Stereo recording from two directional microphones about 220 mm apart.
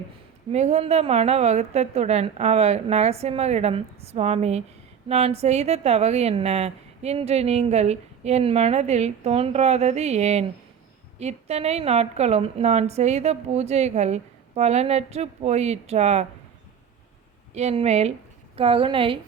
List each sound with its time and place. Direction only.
0.5 s a woman's voice: 30° right (ahead or behind)
17.5 s a woman's voice: 30° right (ahead or behind)